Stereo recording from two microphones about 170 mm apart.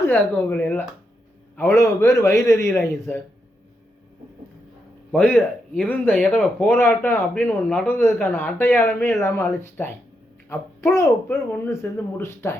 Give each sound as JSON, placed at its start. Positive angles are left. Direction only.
{"t": 0.1, "sound": "speech", "side_deg": 10}
{"t": 5.1, "sound": "speech", "side_deg": 10}
{"t": 10.9, "sound": "speech", "side_deg": 15}